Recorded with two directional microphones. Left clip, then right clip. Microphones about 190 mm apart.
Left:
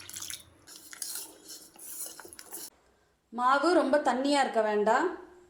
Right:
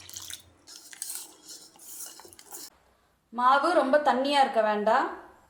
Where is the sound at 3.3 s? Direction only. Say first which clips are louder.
Right 3 dB; 30° left (ahead or behind).